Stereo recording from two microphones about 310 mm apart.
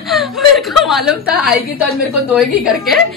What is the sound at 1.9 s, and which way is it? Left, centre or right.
A woman's voice, centre.